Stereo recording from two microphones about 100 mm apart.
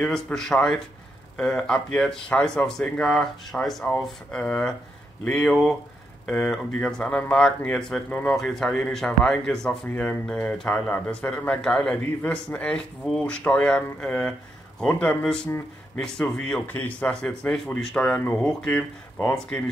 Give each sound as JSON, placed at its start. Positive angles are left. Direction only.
{"t": 0.0, "sound": "a man's voice", "side_deg": 5}